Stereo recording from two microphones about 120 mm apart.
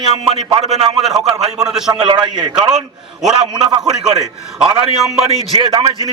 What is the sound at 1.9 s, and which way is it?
Speech, 35° right (ahead or behind).